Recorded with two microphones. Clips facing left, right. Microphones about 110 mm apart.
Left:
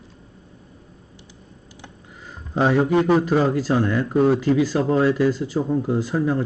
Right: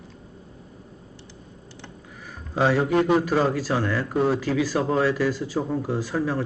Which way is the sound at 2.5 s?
20° left (ahead or behind).